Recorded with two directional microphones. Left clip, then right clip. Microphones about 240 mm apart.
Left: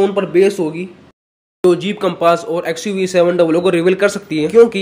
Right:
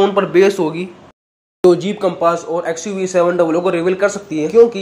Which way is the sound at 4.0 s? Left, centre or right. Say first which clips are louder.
Left 1 dB; left.